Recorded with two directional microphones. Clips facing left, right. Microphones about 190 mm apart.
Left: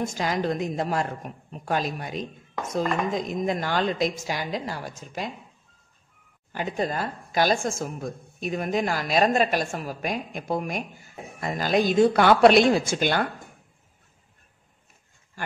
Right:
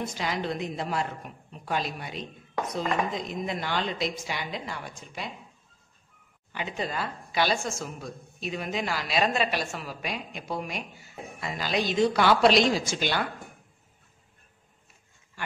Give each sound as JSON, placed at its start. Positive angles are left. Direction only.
{"t": 0.0, "sound": "a woman's voice", "side_deg": 45}
{"t": 6.5, "sound": "a woman's voice", "side_deg": 45}